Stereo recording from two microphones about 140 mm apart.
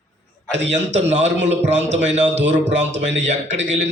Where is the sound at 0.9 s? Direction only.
55° right (ahead or behind).